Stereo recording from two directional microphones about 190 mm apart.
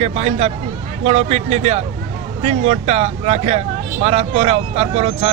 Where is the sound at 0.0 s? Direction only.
35° right (ahead or behind).